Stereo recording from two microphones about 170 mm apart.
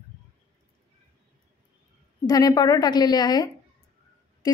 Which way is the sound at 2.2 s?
20° left (ahead or behind).